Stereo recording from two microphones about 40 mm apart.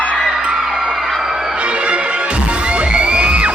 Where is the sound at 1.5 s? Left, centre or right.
Right.